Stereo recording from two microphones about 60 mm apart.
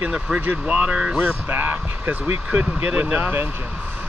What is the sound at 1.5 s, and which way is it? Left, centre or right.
Speech, right.